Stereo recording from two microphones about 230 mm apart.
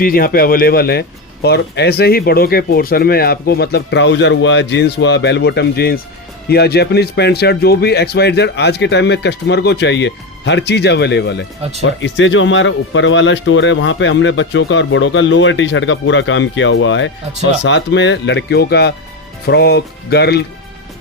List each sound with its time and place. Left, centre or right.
0.0 s speech: left